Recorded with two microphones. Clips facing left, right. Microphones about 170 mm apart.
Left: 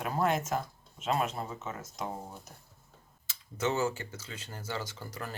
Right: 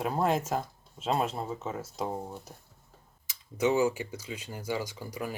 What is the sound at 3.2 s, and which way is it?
Speech, 15° right (ahead or behind).